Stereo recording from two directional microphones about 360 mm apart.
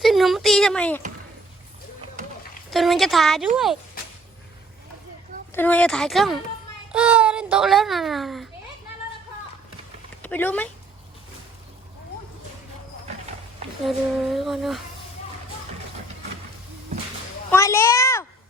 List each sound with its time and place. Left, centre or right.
0.0 s speech: centre
2.6 s a child's voice: centre
5.5 s a child's voice: centre
10.2 s a child's voice: centre
13.8 s a child's voice: centre
17.5 s a child's voice: centre